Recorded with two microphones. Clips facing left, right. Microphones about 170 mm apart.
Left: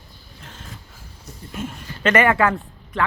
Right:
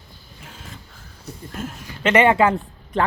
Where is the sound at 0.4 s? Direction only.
5° right (ahead or behind).